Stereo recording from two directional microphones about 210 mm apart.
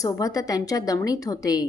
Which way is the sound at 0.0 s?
15° left (ahead or behind).